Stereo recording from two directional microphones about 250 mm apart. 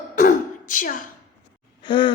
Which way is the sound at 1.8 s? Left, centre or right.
Centre.